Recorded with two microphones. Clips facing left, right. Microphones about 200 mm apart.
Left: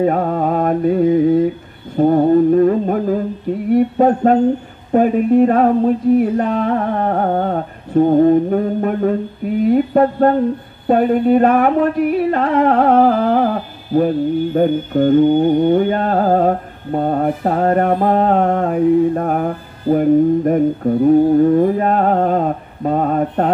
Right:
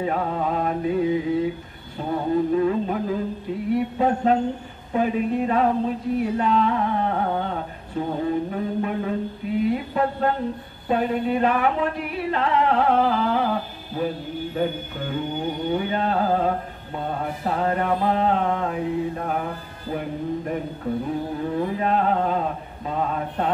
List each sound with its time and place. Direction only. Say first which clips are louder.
0.0 s mantra: left 8 dB; 50° left (ahead or behind)
2.0 s a sound: left 11 dB; 50° left (ahead or behind)
4.9 s music: left 10 dB; 50° left (ahead or behind)